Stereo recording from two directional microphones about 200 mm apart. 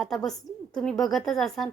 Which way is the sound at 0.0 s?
Centre (ahead or behind).